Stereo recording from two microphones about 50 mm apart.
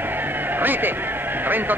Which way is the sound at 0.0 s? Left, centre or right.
Right.